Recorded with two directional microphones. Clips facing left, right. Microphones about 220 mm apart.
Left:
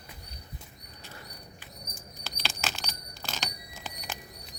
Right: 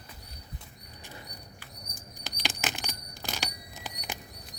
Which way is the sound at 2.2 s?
15° right (ahead or behind).